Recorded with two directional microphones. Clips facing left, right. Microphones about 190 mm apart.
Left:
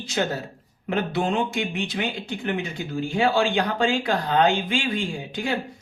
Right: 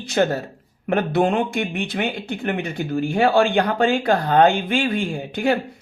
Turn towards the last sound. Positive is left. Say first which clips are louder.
# right 7 dB
turn(degrees=-55)  # may be behind; listen again after turning